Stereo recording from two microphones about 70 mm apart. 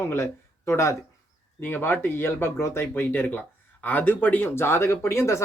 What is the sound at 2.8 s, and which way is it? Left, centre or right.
Speech, left.